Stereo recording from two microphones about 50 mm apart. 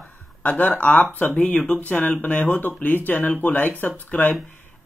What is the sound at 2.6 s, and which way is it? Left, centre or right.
Speech, left.